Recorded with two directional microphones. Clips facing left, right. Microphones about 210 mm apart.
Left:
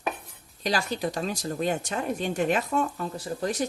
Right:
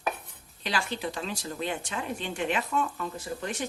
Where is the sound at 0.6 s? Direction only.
40° left (ahead or behind).